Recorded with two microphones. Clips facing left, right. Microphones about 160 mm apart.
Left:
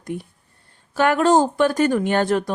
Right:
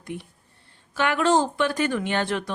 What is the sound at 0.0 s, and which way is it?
A woman's voice, 45° left (ahead or behind).